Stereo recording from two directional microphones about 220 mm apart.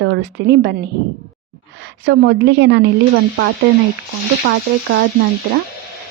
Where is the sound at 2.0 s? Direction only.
50° right (ahead or behind).